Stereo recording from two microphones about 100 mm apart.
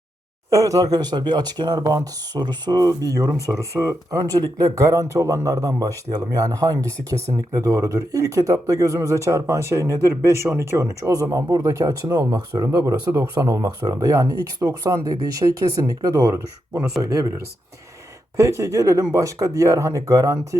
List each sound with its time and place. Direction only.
0.5 s speech: 35° right (ahead or behind)
18.3 s speech: 30° right (ahead or behind)